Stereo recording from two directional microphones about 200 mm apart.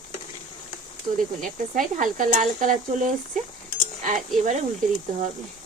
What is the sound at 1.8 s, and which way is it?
Speech, 40° right (ahead or behind).